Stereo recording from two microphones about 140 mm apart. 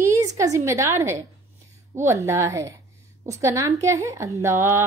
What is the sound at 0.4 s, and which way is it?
A woman's voice, 20° right (ahead or behind).